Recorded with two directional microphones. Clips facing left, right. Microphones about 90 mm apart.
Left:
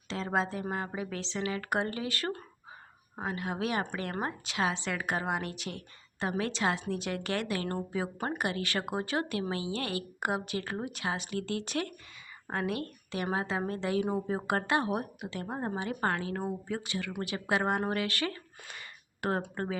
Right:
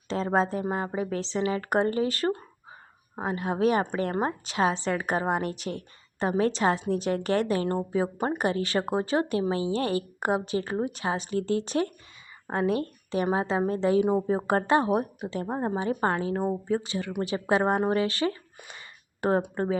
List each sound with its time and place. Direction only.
0.1 s a woman's voice: 40° right (ahead or behind)
19.4 s a woman's voice: 20° right (ahead or behind)